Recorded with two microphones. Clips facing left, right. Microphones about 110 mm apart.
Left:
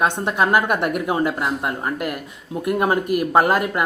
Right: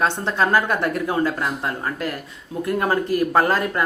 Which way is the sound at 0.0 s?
15° left (ahead or behind).